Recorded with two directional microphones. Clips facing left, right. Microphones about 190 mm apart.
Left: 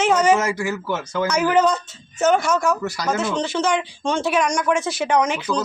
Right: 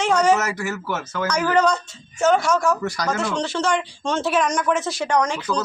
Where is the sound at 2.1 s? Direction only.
20° left (ahead or behind).